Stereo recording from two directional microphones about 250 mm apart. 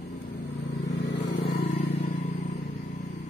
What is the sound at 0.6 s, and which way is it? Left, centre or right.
Vehicle, left.